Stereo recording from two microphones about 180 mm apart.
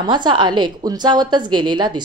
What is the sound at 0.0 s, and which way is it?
A woman's voice, 25° right (ahead or behind).